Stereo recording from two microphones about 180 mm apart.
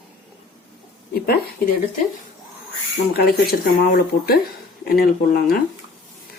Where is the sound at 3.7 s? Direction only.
50° left (ahead or behind).